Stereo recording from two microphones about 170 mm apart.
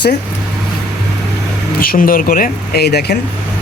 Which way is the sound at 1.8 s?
60° left (ahead or behind).